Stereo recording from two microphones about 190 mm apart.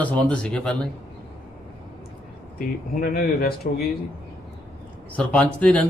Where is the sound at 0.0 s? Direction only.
5° left (ahead or behind).